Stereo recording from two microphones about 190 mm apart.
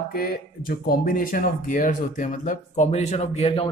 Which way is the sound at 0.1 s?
50° left (ahead or behind).